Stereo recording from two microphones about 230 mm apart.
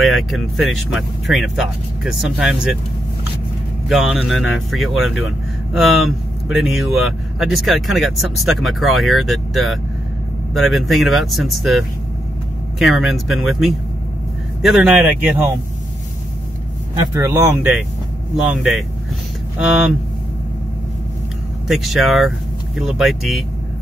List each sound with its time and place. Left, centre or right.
0.0 s speech: centre
3.9 s speech: centre
16.9 s speech: centre
21.6 s speech: centre